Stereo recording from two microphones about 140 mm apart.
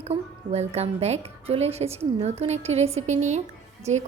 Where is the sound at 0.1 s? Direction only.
50° right (ahead or behind).